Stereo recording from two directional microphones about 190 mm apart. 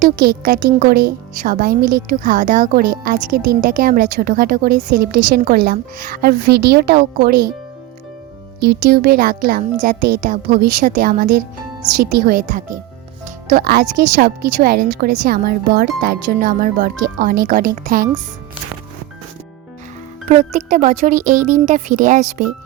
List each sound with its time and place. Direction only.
0.0 s a woman's voice: 50° right (ahead or behind)
8.6 s a woman's voice: 60° right (ahead or behind)
13.2 s music: 45° right (ahead or behind)
13.7 s a woman's voice: 50° right (ahead or behind)
20.2 s speech: 40° right (ahead or behind)